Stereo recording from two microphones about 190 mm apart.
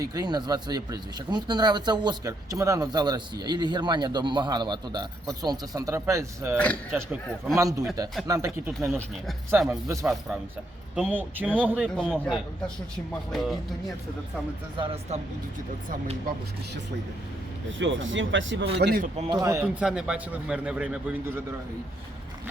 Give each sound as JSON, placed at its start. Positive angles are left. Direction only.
{"t": 0.0, "sound": "speech", "side_deg": -20}
{"t": 17.7, "sound": "speech", "side_deg": -80}
{"t": 18.8, "sound": "a man's voice", "side_deg": -55}
{"t": 19.3, "sound": "speech", "side_deg": -15}
{"t": 19.8, "sound": "speech", "side_deg": -5}